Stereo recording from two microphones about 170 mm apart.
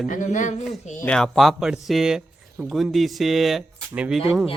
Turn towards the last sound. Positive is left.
turn(degrees=0)  # may be behind; listen again after turning